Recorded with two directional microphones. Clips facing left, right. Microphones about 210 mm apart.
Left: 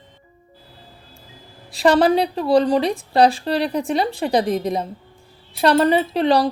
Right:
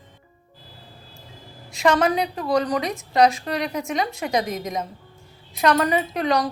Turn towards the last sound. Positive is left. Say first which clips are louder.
# left 5 dB
turn(degrees=30)  # may be behind; listen again after turning